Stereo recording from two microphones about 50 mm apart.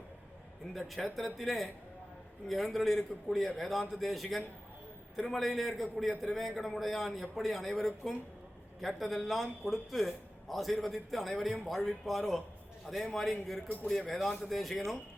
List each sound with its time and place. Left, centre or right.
0.7 s a man's voice: centre
14.2 s a man's voice: centre